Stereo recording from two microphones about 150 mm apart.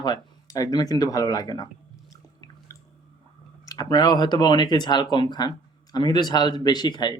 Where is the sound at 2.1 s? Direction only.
20° left (ahead or behind).